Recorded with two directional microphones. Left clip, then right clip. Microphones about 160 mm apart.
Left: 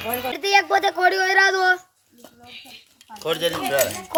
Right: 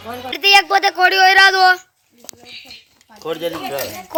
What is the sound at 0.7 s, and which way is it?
Speech, 5° right (ahead or behind).